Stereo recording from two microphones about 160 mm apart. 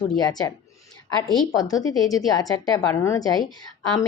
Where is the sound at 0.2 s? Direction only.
25° left (ahead or behind).